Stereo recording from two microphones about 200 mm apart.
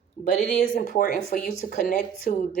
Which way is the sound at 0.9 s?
45° left (ahead or behind).